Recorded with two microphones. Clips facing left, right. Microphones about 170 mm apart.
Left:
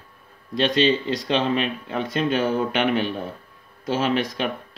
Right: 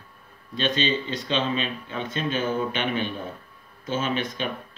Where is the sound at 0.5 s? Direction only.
70° left (ahead or behind).